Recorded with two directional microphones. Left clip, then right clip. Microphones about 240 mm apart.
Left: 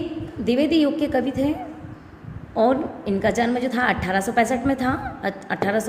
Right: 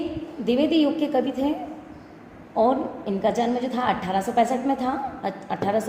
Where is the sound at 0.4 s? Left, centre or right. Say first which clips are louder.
Left 1 dB; left.